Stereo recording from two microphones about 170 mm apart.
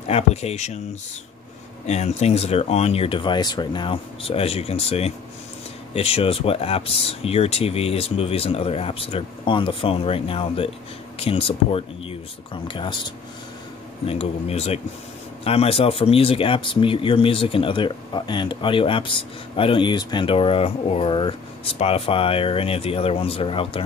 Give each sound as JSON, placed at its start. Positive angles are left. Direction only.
{"t": 0.1, "sound": "speech", "side_deg": 40}
{"t": 1.9, "sound": "speech", "side_deg": 40}
{"t": 14.0, "sound": "speech", "side_deg": 35}